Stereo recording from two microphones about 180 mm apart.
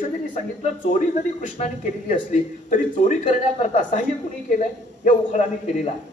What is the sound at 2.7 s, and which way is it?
Speech, 40° left (ahead or behind).